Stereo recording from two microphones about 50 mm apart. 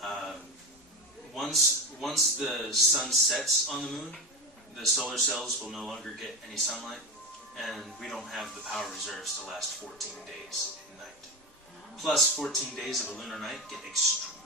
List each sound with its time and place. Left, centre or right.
0.0 s a sound: centre
1.4 s a man's voice: centre
12.0 s a man's voice: centre